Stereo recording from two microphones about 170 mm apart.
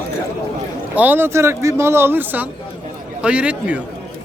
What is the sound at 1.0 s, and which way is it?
Speech, 10° right (ahead or behind).